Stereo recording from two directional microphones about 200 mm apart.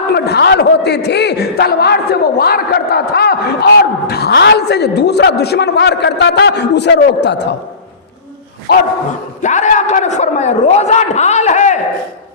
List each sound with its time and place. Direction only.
0.1 s a man's voice: 55° left (ahead or behind)
9.4 s a man's voice: 35° left (ahead or behind)